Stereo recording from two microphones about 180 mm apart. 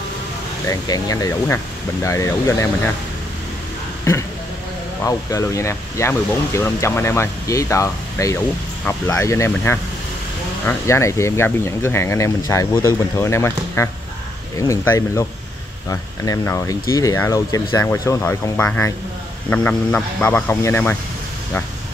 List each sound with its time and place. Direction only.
0.7 s speech: 20° left (ahead or behind)
5.0 s speech: 15° left (ahead or behind)